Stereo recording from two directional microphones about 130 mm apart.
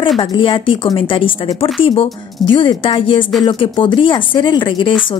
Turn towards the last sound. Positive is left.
turn(degrees=40)  # may be behind; listen again after turning